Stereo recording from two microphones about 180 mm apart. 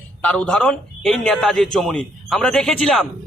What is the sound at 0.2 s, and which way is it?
A man's voice, 5° left (ahead or behind).